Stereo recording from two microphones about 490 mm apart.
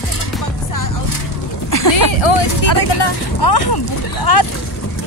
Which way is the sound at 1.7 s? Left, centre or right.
Left.